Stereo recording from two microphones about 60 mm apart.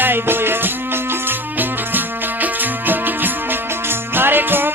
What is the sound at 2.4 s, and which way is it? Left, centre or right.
Music, right.